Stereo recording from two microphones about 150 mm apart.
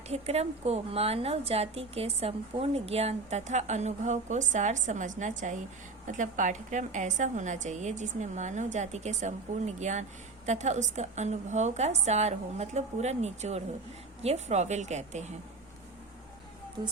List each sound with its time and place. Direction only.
0.1 s a woman's voice: 45° right (ahead or behind)